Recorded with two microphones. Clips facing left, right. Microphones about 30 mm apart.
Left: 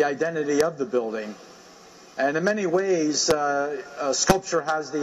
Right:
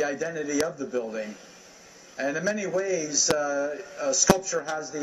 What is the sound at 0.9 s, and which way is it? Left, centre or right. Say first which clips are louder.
A man's voice: left 4 dB; left.